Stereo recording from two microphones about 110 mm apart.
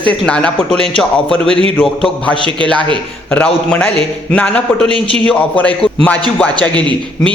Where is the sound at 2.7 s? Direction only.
50° right (ahead or behind).